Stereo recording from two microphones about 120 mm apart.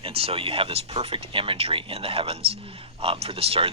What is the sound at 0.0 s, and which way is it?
Speech, 55° right (ahead or behind).